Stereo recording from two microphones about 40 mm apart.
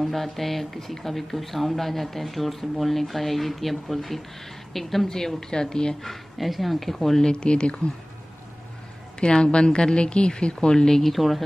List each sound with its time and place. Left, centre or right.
0.0 s a woman's voice: centre
6.0 s speech: centre
7.2 s a woman's voice: left
9.2 s a woman's voice: left
11.1 s speech: centre